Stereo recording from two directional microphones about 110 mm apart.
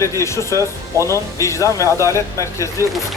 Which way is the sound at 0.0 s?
25° left (ahead or behind).